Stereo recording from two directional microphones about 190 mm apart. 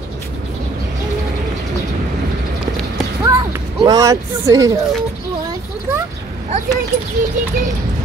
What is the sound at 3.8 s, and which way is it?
Speech, 20° right (ahead or behind).